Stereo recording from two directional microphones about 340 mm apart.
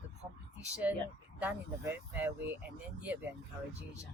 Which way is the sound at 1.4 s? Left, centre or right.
Centre.